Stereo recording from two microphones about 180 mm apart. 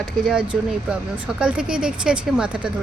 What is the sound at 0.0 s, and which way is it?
Speech, 5° right (ahead or behind).